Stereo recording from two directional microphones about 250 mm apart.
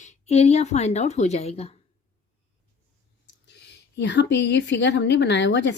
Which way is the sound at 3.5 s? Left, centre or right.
Left.